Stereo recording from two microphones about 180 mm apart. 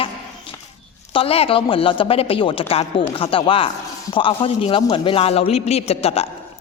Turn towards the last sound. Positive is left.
turn(degrees=35)  # may be behind; listen again after turning